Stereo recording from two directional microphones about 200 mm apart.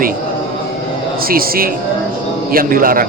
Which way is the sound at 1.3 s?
45° right (ahead or behind).